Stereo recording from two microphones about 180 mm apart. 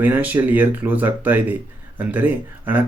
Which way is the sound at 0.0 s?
10° right (ahead or behind).